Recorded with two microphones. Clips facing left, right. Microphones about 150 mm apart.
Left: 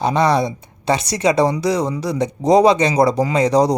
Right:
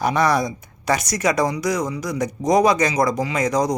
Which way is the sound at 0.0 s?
25° left (ahead or behind).